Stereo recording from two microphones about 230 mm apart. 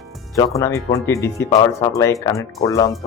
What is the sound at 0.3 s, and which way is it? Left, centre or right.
Speech, centre.